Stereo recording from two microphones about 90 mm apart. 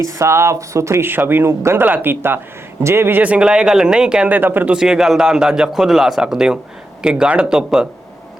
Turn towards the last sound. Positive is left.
turn(degrees=-5)  # may be behind; listen again after turning